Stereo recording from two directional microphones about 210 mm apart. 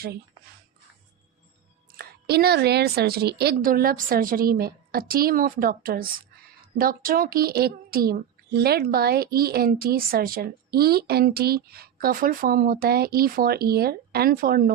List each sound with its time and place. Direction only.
2.0 s speech: 45° right (ahead or behind)